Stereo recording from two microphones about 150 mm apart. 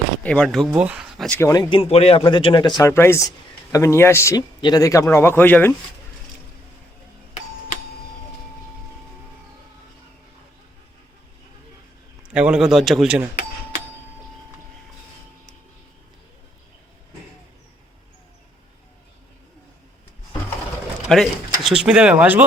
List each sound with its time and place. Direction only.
0.2 s speech: 5° left (ahead or behind)
1.3 s speech: 20° left (ahead or behind)
1.7 s a man's voice: 40° left (ahead or behind)
2.8 s speech: 15° left (ahead or behind)
12.3 s speech: 5° right (ahead or behind)
21.1 s speech: centre (ahead or behind)